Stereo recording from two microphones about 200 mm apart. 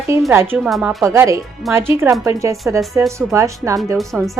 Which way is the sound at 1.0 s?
15° right (ahead or behind).